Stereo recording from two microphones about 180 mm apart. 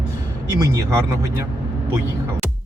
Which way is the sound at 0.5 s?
20° right (ahead or behind).